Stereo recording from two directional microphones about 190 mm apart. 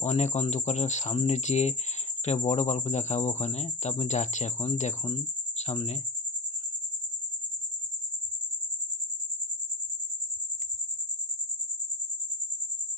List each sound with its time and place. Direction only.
0.0 s speech: 35° left (ahead or behind)